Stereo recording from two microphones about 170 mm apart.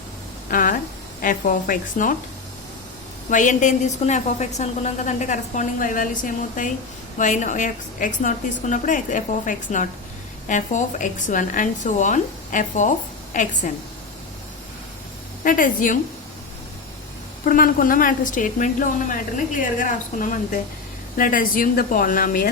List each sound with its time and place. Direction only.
0.5 s a sound: 55° left (ahead or behind)
1.2 s a woman's voice: 55° left (ahead or behind)
3.2 s a woman's voice: 50° left (ahead or behind)
15.4 s a woman's voice: 55° left (ahead or behind)
17.4 s a woman's voice: 55° left (ahead or behind)